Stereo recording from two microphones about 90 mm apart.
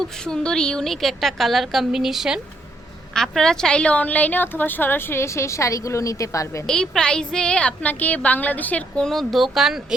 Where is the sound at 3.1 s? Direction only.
5° left (ahead or behind); by 6.7 s 35° left (ahead or behind).